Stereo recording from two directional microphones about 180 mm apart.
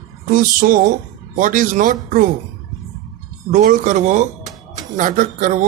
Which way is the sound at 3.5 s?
45° right (ahead or behind).